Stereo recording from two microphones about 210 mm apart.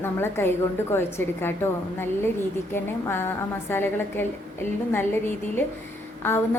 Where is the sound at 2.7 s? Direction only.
10° left (ahead or behind).